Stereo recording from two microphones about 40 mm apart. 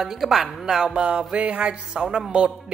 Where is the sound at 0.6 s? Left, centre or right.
Centre.